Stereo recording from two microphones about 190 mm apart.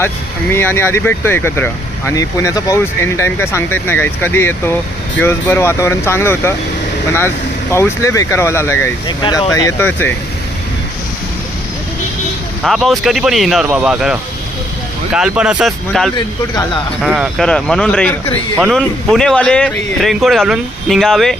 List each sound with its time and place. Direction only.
0.5 s speech: 10° left (ahead or behind)
7.7 s speech: 15° left (ahead or behind)
12.6 s speech: centre (ahead or behind)